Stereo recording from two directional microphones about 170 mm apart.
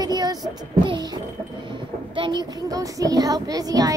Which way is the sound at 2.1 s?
30° right (ahead or behind).